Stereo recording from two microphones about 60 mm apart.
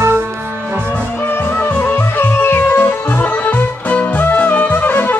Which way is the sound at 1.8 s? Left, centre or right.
Left.